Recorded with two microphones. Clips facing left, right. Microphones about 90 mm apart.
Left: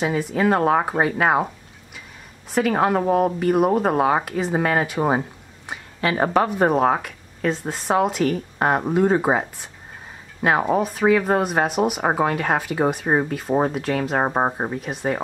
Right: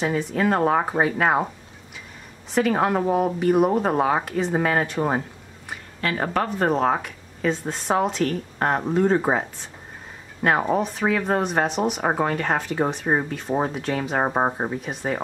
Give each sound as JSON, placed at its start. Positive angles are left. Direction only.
{"t": 0.0, "sound": "speech", "side_deg": 5}
{"t": 2.5, "sound": "speech", "side_deg": 0}
{"t": 5.7, "sound": "speech", "side_deg": 20}
{"t": 6.4, "sound": "speech", "side_deg": 10}